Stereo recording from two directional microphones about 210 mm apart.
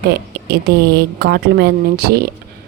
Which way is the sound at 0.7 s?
50° right (ahead or behind).